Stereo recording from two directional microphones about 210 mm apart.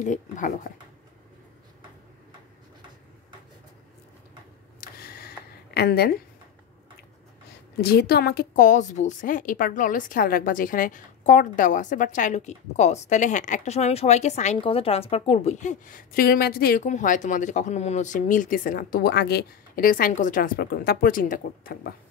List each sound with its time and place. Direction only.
0.0 s a woman's voice: 35° left (ahead or behind)
4.7 s a sound: 45° left (ahead or behind)
5.8 s a woman's voice: 50° left (ahead or behind)
7.8 s a woman's voice: 50° left (ahead or behind)